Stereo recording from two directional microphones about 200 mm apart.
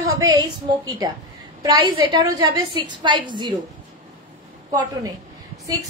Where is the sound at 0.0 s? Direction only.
15° right (ahead or behind).